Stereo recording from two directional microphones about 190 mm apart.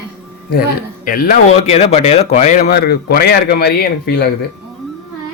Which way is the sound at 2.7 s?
55° left (ahead or behind).